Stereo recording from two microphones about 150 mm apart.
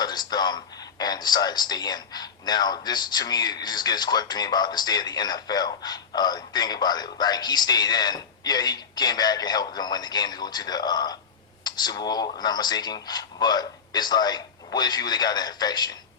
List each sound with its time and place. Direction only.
0.0 s a man's voice: 30° left (ahead or behind)